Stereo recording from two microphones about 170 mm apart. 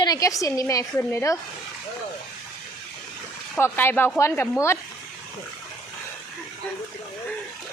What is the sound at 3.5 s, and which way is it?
Speech, 15° left (ahead or behind).